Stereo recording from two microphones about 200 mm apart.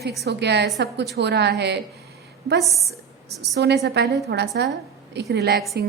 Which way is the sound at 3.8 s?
60° right (ahead or behind).